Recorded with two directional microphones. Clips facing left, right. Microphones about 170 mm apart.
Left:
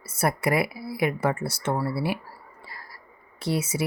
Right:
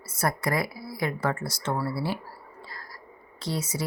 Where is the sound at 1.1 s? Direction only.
15° left (ahead or behind).